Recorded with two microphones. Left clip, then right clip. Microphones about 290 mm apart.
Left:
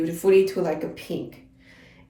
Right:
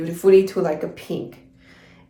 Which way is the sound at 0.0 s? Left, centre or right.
Centre.